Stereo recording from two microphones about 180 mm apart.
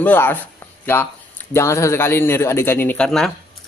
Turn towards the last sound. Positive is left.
turn(degrees=5)  # may be behind; listen again after turning